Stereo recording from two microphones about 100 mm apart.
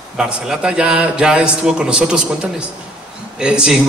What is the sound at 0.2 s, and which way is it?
A man's voice, 10° right (ahead or behind).